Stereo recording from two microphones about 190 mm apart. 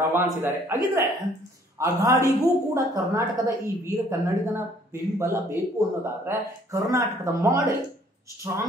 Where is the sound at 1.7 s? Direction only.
15° right (ahead or behind).